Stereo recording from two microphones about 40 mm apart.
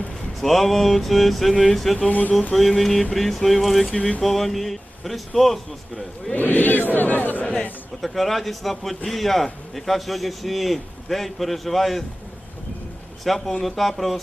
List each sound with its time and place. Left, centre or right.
0.3 s speech: centre
2.0 s music: left
2.5 s speech: centre
6.3 s speech: left
8.0 s speech: centre
13.2 s speech: centre